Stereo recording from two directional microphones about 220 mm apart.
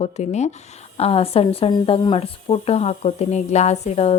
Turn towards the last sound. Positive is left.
turn(degrees=30)  # may be behind; listen again after turning